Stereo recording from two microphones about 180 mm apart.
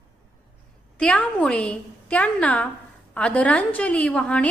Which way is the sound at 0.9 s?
5° left (ahead or behind).